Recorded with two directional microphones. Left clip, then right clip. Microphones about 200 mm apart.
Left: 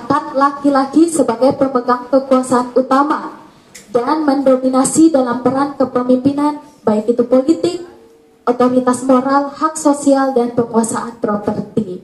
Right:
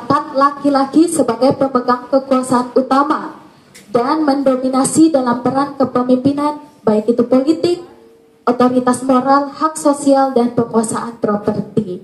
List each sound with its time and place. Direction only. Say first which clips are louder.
0.1 s a woman's voice: right 1 dB; 45° right (ahead or behind)